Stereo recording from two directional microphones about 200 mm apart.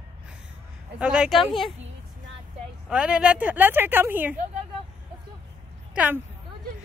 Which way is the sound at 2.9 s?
5° right (ahead or behind).